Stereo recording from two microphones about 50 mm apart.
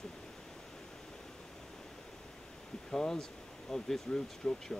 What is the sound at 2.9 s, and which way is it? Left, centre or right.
Speech, centre.